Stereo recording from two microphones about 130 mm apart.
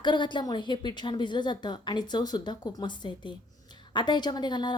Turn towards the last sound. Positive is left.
turn(degrees=35)  # may be behind; listen again after turning